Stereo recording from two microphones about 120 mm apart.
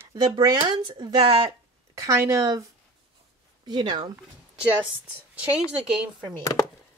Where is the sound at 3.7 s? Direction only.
40° right (ahead or behind).